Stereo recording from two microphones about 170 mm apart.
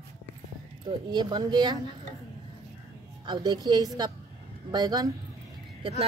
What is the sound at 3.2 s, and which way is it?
A woman's voice, 25° right (ahead or behind).